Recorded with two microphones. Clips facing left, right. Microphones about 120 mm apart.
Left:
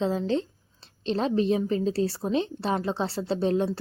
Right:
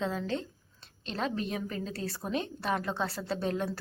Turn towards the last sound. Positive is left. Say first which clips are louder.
# left 7 dB
turn(degrees=30)  # may be behind; listen again after turning